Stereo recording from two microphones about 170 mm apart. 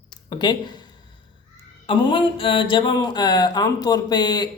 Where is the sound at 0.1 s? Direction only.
25° left (ahead or behind).